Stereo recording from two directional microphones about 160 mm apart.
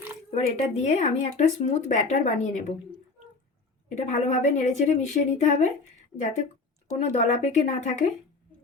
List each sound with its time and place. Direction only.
0.3 s speech: 45° left (ahead or behind)
3.8 s speech: 45° left (ahead or behind)
7.0 s speech: 45° left (ahead or behind)